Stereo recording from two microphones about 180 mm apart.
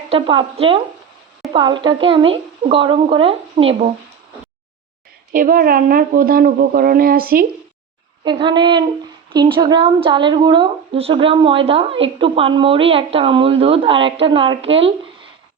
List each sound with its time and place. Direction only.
0.1 s a woman's voice: 30° right (ahead or behind)
5.3 s speech: 50° right (ahead or behind)
8.2 s a woman's voice: 25° right (ahead or behind)